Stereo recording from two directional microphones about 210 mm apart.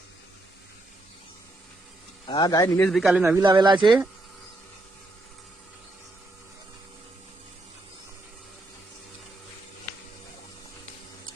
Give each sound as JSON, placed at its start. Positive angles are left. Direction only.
{"t": 2.2, "sound": "a man's voice", "side_deg": 20}
{"t": 2.8, "sound": "speech", "side_deg": 0}
{"t": 3.3, "sound": "speech", "side_deg": -20}